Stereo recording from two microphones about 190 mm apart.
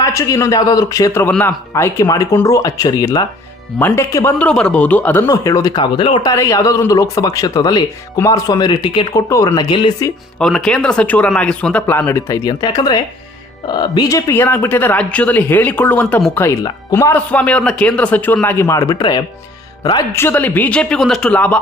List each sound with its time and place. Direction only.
0.0 s a man's voice: 15° left (ahead or behind)
10.4 s a man's voice: centre (ahead or behind)